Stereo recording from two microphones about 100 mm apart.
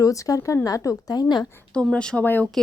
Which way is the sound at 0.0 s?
35° left (ahead or behind).